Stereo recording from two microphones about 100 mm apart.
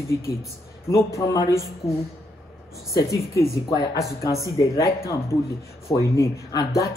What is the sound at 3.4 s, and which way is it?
Speech, 30° left (ahead or behind).